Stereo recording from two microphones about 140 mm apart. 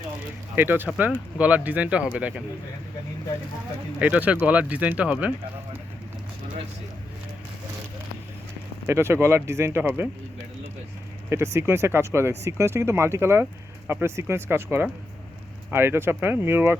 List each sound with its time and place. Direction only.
0.5 s speech: 15° right (ahead or behind)
4.0 s speech: 10° right (ahead or behind)
8.9 s speech: 20° right (ahead or behind)
11.3 s speech: 20° right (ahead or behind)